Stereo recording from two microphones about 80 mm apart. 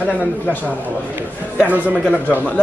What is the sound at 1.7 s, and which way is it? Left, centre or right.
Speech, centre.